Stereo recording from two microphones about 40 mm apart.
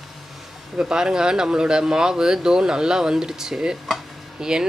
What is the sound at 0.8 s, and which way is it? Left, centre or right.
Speech, centre.